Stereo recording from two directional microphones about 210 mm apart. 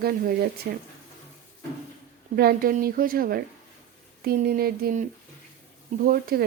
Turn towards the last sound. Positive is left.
turn(degrees=-45)  # may be behind; listen again after turning